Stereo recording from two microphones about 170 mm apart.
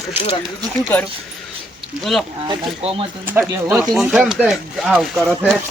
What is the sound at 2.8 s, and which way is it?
Speech, 35° right (ahead or behind).